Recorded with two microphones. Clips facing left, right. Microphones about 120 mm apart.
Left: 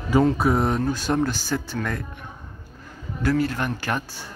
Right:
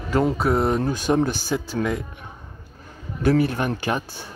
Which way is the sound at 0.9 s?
15° right (ahead or behind).